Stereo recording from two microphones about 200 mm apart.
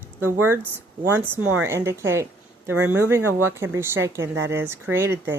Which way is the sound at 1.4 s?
90° right.